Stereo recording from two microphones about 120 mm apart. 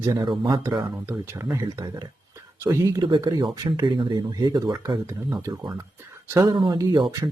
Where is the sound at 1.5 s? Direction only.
30° right (ahead or behind).